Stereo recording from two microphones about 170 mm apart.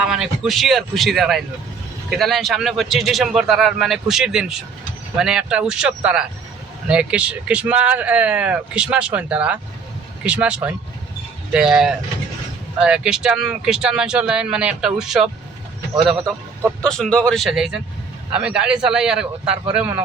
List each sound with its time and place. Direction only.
0.0 s a man's voice: 5° right (ahead or behind)
16.8 s a man's voice: 5° left (ahead or behind)